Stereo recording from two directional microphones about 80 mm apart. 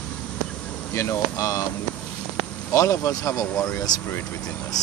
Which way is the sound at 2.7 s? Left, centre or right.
Left.